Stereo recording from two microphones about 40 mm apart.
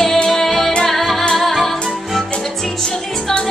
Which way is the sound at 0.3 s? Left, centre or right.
Centre.